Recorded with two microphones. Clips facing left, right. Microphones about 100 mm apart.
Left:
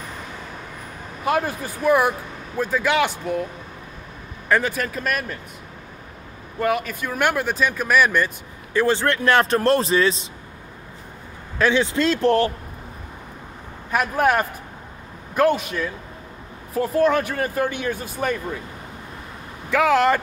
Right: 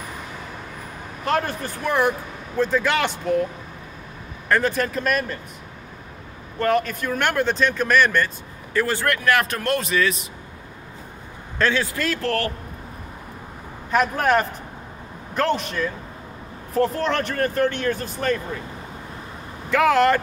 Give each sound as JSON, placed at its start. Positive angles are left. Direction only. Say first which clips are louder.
{"t": 1.2, "sound": "speech", "louder": "left 1 dB", "side_deg": 5}
{"t": 4.5, "sound": "speech", "louder": "right 1 dB", "side_deg": 0}
{"t": 6.6, "sound": "speech", "louder": "right 2 dB", "side_deg": 5}
{"t": 8.7, "sound": "speech", "louder": "left 3 dB", "side_deg": 20}
{"t": 11.5, "sound": "speech", "louder": "left 3 dB", "side_deg": 15}
{"t": 13.8, "sound": "speech", "louder": "even", "side_deg": 5}
{"t": 19.7, "sound": "speech", "louder": "even", "side_deg": 0}